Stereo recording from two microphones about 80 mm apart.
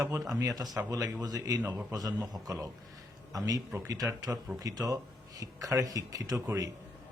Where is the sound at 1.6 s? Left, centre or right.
Right.